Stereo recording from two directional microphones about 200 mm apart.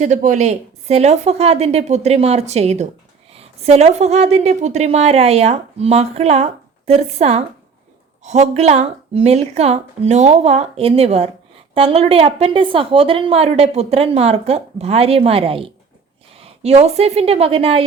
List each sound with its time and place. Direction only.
0.0 s a woman's voice: 40° right (ahead or behind)